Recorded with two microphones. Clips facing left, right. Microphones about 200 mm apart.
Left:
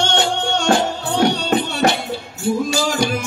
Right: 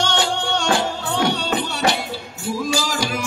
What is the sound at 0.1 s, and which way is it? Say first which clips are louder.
Music: left 2 dB; 50° left (ahead or behind).